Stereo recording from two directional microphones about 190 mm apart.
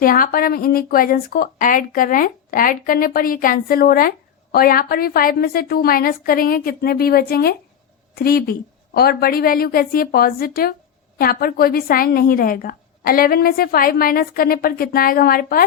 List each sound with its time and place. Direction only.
0.0 s a woman's voice: 50° left (ahead or behind)